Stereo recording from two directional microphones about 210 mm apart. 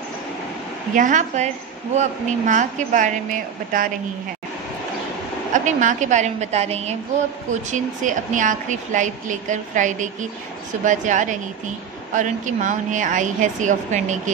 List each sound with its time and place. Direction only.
0.9 s a woman's voice: 35° right (ahead or behind)
5.5 s a woman's voice: 35° right (ahead or behind)